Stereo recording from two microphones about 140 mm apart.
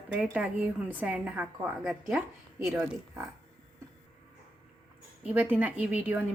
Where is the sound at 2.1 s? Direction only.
20° right (ahead or behind).